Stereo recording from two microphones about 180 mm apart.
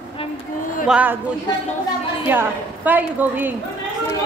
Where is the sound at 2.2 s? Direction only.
10° right (ahead or behind).